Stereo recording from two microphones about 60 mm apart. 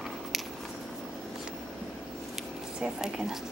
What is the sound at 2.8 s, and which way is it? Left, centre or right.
Speech, centre.